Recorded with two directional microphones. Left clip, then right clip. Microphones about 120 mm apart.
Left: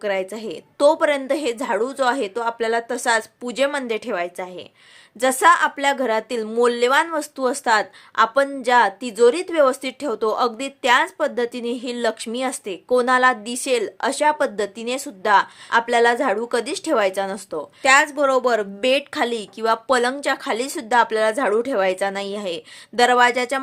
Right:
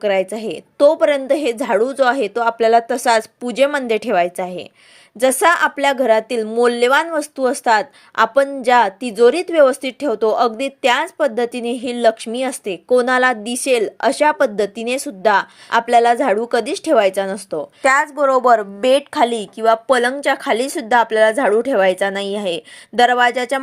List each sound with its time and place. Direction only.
0.0 s speech: 25° right (ahead or behind)
0.8 s a woman's voice: 15° right (ahead or behind)